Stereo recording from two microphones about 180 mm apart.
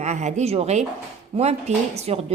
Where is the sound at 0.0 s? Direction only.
40° right (ahead or behind).